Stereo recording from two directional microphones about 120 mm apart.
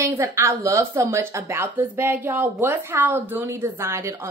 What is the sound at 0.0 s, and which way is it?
A woman's voice, 25° right (ahead or behind).